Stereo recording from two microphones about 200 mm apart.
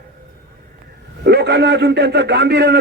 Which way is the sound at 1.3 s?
55° right (ahead or behind).